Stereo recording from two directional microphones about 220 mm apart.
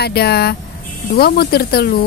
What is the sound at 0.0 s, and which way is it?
Speech, 45° left (ahead or behind).